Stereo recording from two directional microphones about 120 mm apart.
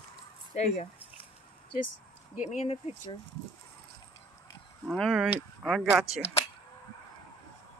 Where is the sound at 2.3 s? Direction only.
70° left (ahead or behind).